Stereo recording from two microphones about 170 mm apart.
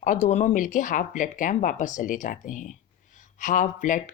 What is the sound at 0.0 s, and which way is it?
Speech, 50° left (ahead or behind).